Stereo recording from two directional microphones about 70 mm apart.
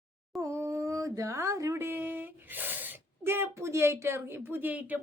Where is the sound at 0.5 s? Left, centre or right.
Right.